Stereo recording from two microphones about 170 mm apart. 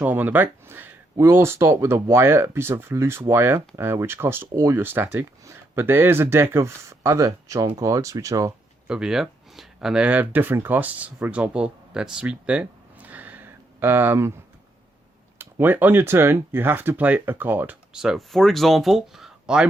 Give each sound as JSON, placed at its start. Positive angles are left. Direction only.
{"t": 0.0, "sound": "speech", "side_deg": -10}
{"t": 8.9, "sound": "speech", "side_deg": -5}
{"t": 15.4, "sound": "speech", "side_deg": -10}